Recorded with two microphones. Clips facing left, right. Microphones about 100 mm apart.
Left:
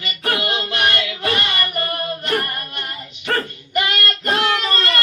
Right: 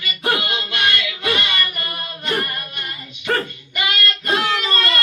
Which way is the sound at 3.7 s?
40° left (ahead or behind).